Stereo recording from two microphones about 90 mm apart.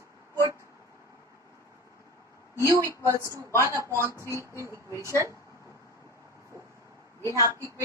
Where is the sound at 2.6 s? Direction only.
30° right (ahead or behind).